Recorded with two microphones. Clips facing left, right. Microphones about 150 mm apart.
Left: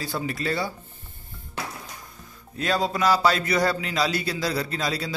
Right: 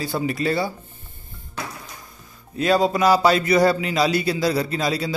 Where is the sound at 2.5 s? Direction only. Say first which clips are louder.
Right 6 dB; 10° right (ahead or behind).